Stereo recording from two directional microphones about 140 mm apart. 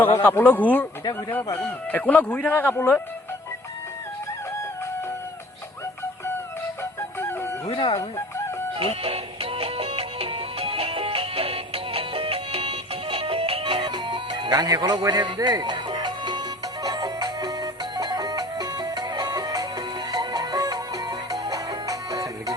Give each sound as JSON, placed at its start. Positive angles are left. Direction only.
{"t": 0.0, "sound": "a man's voice", "side_deg": 15}
{"t": 7.2, "sound": "music", "side_deg": 15}
{"t": 7.7, "sound": "speech", "side_deg": 40}
{"t": 8.8, "sound": "music", "side_deg": -45}